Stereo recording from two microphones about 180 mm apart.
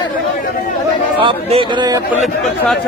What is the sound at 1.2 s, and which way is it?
Speech, 30° right (ahead or behind).